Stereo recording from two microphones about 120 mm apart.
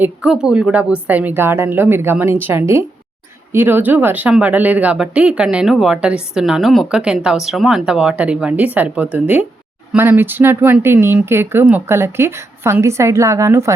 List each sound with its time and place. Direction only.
0.0 s a woman's voice: 5° right (ahead or behind); by 13.7 s 25° right (ahead or behind)